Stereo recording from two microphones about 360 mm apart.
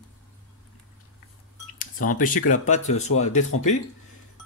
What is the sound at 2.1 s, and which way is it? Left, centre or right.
A man's voice, left.